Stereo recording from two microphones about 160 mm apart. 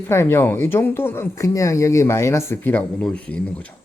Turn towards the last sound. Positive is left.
turn(degrees=10)  # may be behind; listen again after turning